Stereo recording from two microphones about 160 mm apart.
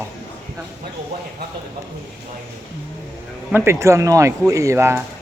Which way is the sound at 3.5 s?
15° right (ahead or behind).